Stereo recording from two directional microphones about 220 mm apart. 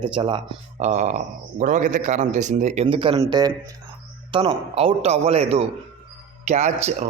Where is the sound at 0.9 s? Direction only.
35° right (ahead or behind).